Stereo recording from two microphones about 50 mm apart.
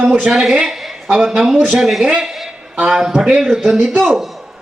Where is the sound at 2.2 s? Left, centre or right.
Centre.